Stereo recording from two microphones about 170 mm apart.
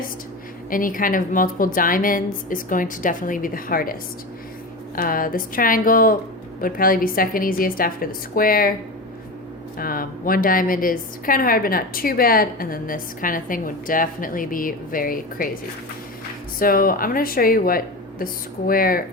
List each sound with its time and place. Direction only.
0.7 s a woman's voice: 55° left (ahead or behind)
4.9 s a woman's voice: 55° left (ahead or behind)
9.7 s a woman's voice: 60° left (ahead or behind)
16.6 s a woman's voice: 55° left (ahead or behind)